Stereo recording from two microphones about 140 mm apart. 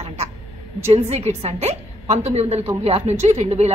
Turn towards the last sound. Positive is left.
turn(degrees=-50)  # may be behind; listen again after turning